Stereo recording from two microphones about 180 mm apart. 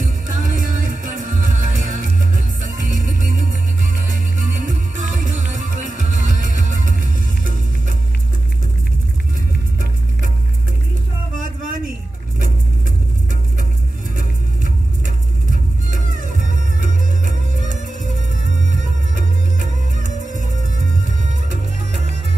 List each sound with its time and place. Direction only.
0.0 s music: 45° right (ahead or behind)
11.3 s a sound: 50° right (ahead or behind)
14.1 s music: 45° right (ahead or behind)
21.5 s music: 40° right (ahead or behind)